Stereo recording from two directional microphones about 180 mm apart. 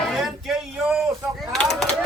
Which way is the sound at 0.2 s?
Centre (ahead or behind).